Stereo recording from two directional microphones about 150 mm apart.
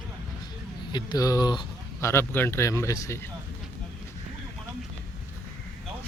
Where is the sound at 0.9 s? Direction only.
25° left (ahead or behind).